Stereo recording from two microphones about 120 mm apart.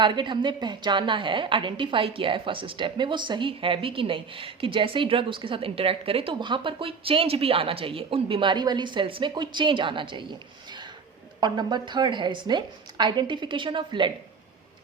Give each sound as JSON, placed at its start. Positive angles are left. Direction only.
{"t": 0.0, "sound": "a woman's voice", "side_deg": -40}
{"t": 11.3, "sound": "a woman's voice", "side_deg": -40}